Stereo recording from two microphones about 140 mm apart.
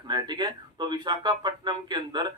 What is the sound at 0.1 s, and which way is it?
Speech, 30° right (ahead or behind).